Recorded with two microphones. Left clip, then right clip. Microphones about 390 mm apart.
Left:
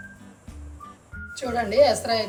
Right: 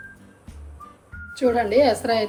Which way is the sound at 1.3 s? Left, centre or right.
Centre.